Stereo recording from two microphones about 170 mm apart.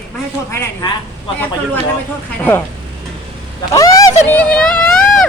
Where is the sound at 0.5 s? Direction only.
15° left (ahead or behind).